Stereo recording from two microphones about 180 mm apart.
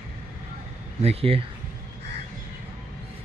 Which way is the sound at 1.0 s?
35° right (ahead or behind).